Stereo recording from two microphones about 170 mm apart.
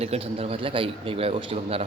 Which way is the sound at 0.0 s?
35° right (ahead or behind).